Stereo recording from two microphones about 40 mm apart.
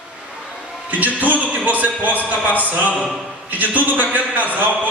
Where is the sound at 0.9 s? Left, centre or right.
Right.